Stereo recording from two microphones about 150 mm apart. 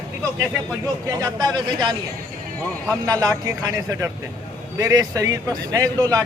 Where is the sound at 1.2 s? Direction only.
30° right (ahead or behind).